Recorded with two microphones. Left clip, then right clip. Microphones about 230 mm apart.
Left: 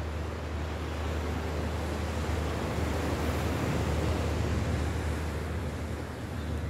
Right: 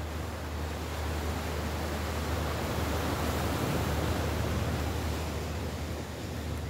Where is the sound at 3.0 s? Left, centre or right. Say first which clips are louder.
Even; right.